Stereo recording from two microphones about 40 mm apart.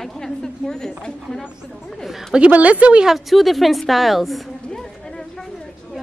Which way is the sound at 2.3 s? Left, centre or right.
Right.